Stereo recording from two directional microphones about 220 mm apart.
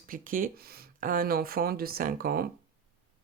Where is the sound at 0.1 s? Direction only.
40° right (ahead or behind).